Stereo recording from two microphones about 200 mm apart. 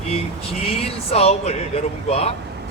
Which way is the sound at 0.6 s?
30° left (ahead or behind).